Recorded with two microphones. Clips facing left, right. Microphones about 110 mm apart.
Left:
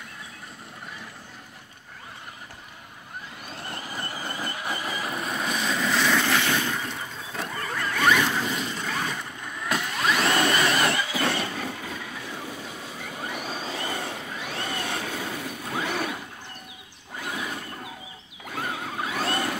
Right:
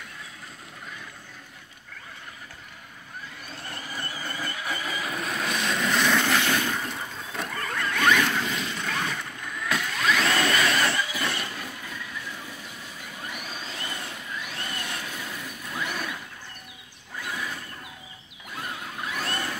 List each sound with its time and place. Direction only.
4.2 s vehicle: 15° left (ahead or behind)
5.2 s vehicle: 10° left (ahead or behind)
9.8 s a sound: 15° left (ahead or behind)
10.5 s vehicle: 15° left (ahead or behind)
11.1 s vehicle: 35° left (ahead or behind)
17.2 s a sound: 25° left (ahead or behind)
18.8 s vehicle: 25° left (ahead or behind)